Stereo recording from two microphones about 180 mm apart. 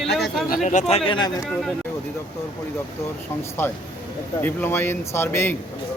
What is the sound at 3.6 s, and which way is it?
Speech, 15° left (ahead or behind).